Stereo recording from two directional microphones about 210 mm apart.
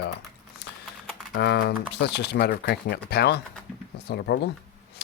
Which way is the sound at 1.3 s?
50° left (ahead or behind).